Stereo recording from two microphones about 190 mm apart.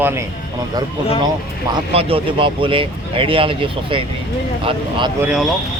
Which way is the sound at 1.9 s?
30° right (ahead or behind).